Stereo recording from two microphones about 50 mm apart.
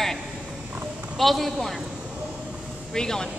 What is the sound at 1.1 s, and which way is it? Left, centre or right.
Speech, centre.